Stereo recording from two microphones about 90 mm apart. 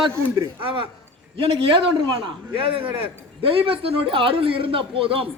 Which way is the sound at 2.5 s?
90° right.